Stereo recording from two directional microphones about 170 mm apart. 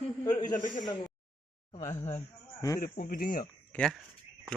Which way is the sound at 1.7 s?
45° left (ahead or behind).